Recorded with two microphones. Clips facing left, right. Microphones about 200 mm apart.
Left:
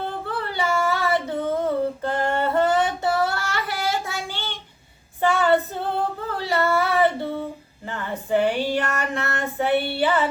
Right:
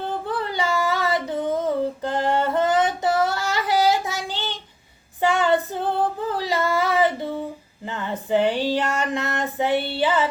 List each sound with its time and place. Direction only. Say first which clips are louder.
0.3 s female singing: even; 15° right (ahead or behind)
6.2 s singing: even; 15° right (ahead or behind)
7.9 s female singing: right 1 dB; 20° right (ahead or behind)
10.0 s a sound: right 2 dB; 15° right (ahead or behind)